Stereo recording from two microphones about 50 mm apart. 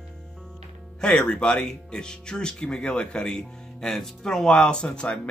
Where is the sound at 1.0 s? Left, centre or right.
Left.